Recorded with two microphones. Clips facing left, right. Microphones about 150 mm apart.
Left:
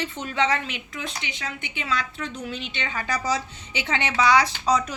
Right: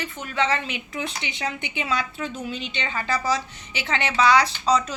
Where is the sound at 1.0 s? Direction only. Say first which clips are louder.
Right 3 dB; 20° right (ahead or behind).